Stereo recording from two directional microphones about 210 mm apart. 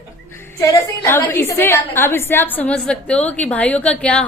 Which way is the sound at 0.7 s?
10° left (ahead or behind).